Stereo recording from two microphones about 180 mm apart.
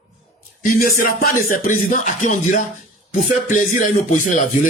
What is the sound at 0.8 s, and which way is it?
A man's voice, 50° left (ahead or behind).